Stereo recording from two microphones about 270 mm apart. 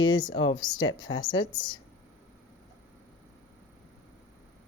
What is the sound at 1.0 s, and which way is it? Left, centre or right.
Speech, left.